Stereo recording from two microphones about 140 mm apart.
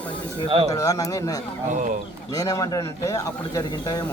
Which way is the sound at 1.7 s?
65° right (ahead or behind).